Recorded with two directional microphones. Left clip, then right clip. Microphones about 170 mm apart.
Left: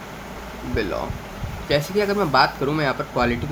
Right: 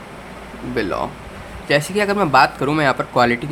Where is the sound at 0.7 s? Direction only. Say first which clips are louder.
Right 4 dB; 50° right (ahead or behind).